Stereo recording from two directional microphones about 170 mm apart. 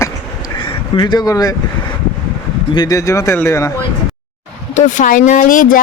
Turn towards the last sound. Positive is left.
turn(degrees=55)  # may be behind; listen again after turning